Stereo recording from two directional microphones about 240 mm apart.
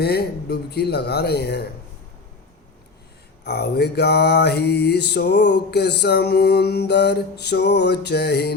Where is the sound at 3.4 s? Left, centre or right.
Left.